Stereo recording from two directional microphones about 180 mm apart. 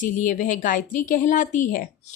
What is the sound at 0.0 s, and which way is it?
A woman's voice, 45° left (ahead or behind).